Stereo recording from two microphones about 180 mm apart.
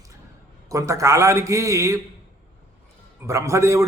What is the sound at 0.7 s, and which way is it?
A man's voice, 15° right (ahead or behind).